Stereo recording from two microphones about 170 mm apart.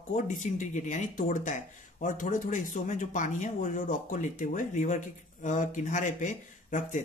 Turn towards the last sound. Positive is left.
turn(degrees=45)  # may be behind; listen again after turning